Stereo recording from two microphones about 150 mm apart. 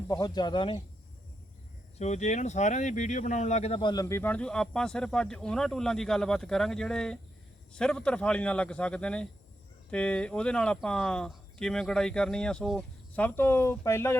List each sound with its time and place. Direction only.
0.1 s speech: 25° left (ahead or behind)
2.0 s speech: 50° left (ahead or behind); by 4.0 s 35° left (ahead or behind)
4.0 s a man's voice: 15° left (ahead or behind)